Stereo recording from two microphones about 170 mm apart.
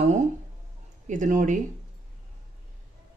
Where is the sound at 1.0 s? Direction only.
50° right (ahead or behind).